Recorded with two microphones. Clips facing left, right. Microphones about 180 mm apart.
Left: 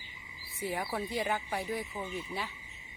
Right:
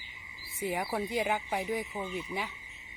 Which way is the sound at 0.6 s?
15° right (ahead or behind).